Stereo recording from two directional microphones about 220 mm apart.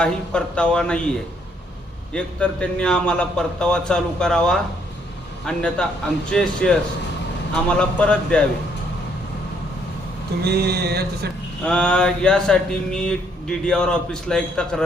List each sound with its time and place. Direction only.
0.0 s speech: 5° left (ahead or behind)
2.1 s speech: 5° left (ahead or behind)
10.4 s a sound: 45° right (ahead or behind)
11.6 s speech: 5° left (ahead or behind)